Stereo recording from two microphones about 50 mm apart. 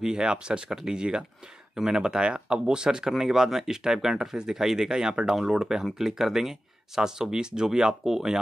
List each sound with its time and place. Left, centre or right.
0.0 s speech: centre